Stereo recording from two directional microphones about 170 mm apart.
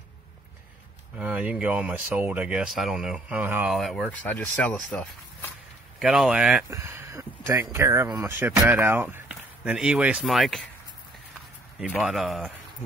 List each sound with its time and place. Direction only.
1.1 s speech: 5° right (ahead or behind)
3.7 s speech: centre (ahead or behind)
5.9 s speech: centre (ahead or behind)
6.7 s a sound: 15° right (ahead or behind)
7.7 s speech: 15° right (ahead or behind); by 10.7 s centre (ahead or behind)
12.0 s speech: centre (ahead or behind)